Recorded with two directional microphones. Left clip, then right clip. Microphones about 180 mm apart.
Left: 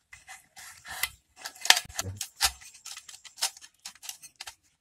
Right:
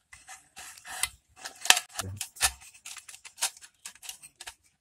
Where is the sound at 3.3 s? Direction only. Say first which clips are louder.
Left 1 dB; 5° right (ahead or behind).